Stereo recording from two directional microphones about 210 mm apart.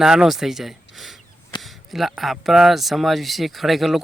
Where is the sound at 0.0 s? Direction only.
Centre (ahead or behind).